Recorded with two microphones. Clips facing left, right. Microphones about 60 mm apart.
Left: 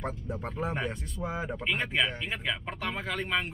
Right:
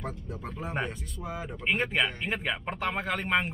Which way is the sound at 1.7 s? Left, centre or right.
Right.